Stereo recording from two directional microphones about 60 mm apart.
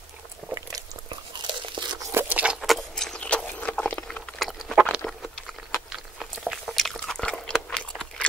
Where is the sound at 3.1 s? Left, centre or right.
Centre.